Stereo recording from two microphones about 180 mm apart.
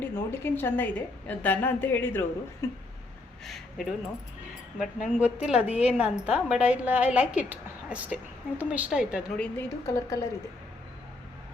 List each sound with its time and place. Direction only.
0.0 s a woman's voice: 10° left (ahead or behind)
3.4 s speech: centre (ahead or behind)
5.2 s a woman's voice: 5° right (ahead or behind)
9.4 s a woman's voice: 15° left (ahead or behind)